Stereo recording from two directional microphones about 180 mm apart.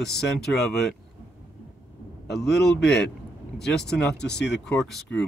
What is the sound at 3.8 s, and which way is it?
Speech, 70° left (ahead or behind).